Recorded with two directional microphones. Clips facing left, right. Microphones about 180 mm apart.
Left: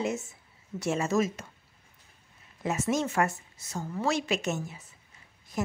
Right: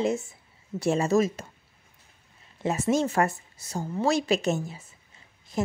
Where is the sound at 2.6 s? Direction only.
30° right (ahead or behind).